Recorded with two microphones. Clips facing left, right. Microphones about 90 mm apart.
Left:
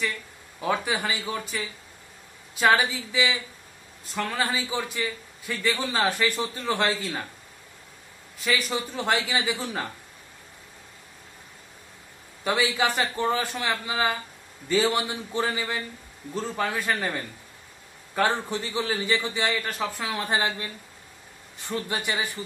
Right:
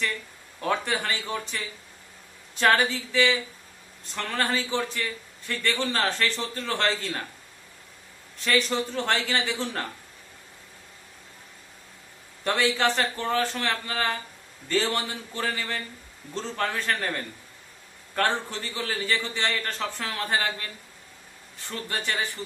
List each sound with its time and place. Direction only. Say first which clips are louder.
0.6 s a man's voice: left 1 dB; 10° left (ahead or behind)
8.4 s a man's voice: right 2 dB; 5° left (ahead or behind)
12.4 s a man's voice: even; 10° left (ahead or behind)